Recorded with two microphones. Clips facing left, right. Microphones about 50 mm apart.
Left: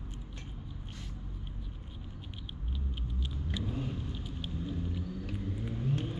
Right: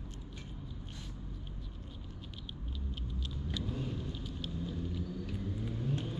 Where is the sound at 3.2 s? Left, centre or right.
Centre.